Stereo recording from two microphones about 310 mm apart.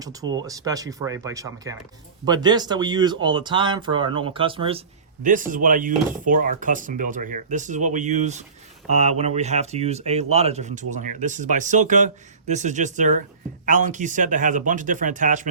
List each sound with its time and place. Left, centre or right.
0.0 s speech: centre